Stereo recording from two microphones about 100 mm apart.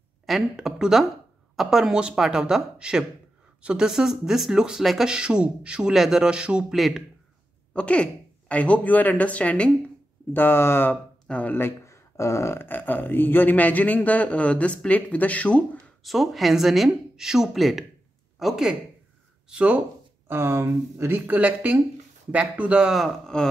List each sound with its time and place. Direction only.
0.3 s speech: 5° right (ahead or behind)
7.7 s speech: 10° left (ahead or behind)
16.0 s speech: centre (ahead or behind)
20.2 s speech: 25° right (ahead or behind); by 23.5 s 5° left (ahead or behind)